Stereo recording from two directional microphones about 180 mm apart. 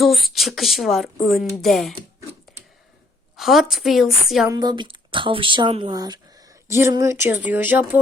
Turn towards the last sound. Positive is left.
turn(degrees=-10)  # may be behind; listen again after turning